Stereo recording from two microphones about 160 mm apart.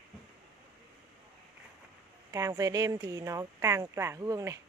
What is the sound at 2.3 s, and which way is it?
Speech, 20° right (ahead or behind).